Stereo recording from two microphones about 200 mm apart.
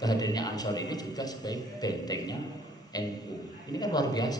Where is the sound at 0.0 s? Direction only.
20° left (ahead or behind).